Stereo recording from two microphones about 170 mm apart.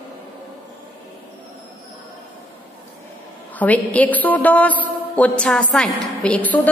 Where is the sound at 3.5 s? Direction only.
10° left (ahead or behind).